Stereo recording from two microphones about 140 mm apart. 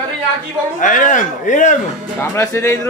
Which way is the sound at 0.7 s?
65° left (ahead or behind).